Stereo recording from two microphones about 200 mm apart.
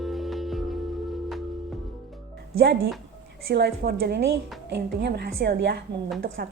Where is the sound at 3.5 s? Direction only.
55° right (ahead or behind).